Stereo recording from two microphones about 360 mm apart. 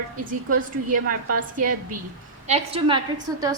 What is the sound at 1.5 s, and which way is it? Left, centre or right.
A woman's voice, right.